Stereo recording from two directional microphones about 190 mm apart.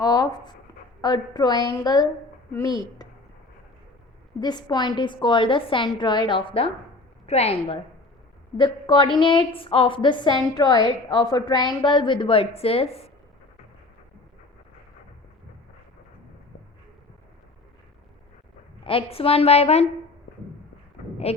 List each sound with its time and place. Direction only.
0.0 s a woman's voice: 20° left (ahead or behind)
4.4 s a woman's voice: 20° left (ahead or behind)
19.1 s a woman's voice: 30° left (ahead or behind)
21.3 s a woman's voice: 35° left (ahead or behind)